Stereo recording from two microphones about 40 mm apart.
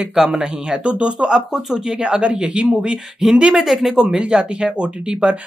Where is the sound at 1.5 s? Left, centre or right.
Centre.